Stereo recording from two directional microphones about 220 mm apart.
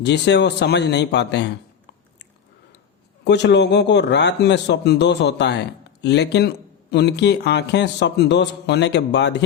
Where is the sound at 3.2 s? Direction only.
50° left (ahead or behind).